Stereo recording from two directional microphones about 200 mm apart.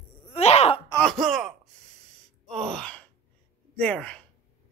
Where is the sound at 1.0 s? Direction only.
Centre (ahead or behind).